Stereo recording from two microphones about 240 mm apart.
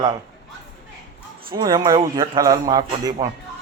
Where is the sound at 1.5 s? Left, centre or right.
Centre.